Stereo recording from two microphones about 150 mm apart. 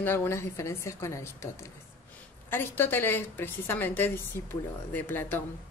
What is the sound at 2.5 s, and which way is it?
A woman's voice, 15° left (ahead or behind).